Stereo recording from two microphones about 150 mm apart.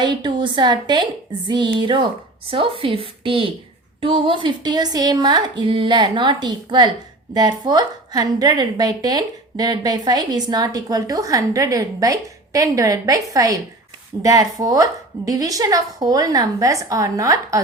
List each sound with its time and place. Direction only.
0.0 s a woman's voice: 30° right (ahead or behind)